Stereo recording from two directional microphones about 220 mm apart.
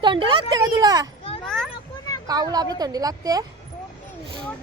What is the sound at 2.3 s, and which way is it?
A woman's voice, 15° right (ahead or behind).